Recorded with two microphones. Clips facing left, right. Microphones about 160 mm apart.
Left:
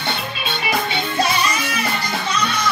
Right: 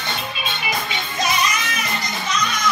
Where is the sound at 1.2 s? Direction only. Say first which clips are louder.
Left 1 dB; 30° left (ahead or behind).